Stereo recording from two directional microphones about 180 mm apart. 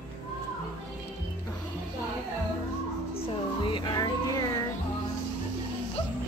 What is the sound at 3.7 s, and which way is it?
Music, 25° left (ahead or behind).